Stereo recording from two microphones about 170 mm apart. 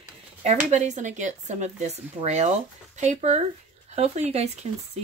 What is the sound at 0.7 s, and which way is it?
Speech, 40° right (ahead or behind).